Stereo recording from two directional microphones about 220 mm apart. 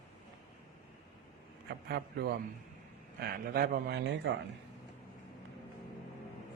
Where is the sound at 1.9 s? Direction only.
45° right (ahead or behind).